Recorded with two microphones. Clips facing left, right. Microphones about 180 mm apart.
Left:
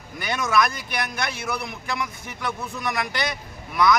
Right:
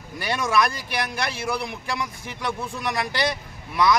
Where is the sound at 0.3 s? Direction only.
30° right (ahead or behind).